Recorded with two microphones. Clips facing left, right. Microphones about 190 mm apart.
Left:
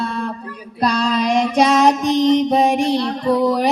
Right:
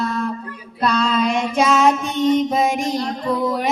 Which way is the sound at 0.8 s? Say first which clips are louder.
Left 1 dB; 35° left (ahead or behind).